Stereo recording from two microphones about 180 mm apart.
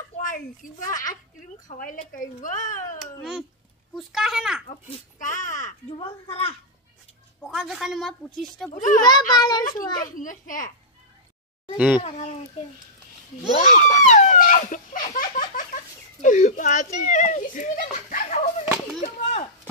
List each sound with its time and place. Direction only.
0.2 s a woman's voice: 45° left (ahead or behind)
3.2 s a woman's voice: centre (ahead or behind)
5.2 s a child's voice: 45° left (ahead or behind)
5.9 s a woman's voice: 30° left (ahead or behind)
7.4 s a woman's voice: centre (ahead or behind)
8.7 s a child's voice: 45° left (ahead or behind)
9.0 s a child's voice: 25° left (ahead or behind)
10.1 s a child's voice: 45° left (ahead or behind)
11.7 s a child's voice: 10° right (ahead or behind)
12.0 s a woman's voice: 35° left (ahead or behind)
13.6 s a child's voice: 40° left (ahead or behind)